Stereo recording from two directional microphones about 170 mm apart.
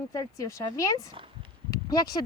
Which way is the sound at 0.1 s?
20° left (ahead or behind).